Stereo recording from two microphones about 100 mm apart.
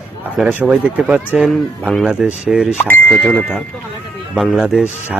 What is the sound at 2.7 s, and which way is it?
Speech, 20° left (ahead or behind).